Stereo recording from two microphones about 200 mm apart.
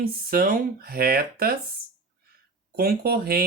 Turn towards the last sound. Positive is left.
turn(degrees=-50)  # may be behind; listen again after turning